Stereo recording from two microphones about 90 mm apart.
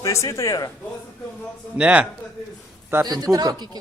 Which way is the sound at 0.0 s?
35° left (ahead or behind).